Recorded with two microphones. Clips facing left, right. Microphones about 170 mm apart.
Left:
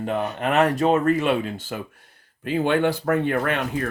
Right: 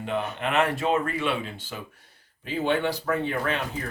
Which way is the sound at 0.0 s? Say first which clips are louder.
Left 4 dB; 40° left (ahead or behind).